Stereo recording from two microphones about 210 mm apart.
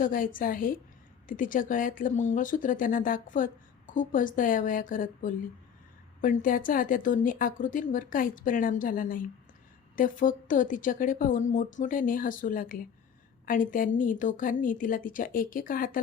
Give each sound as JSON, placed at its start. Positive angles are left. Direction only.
{"t": 0.0, "sound": "speech", "side_deg": 40}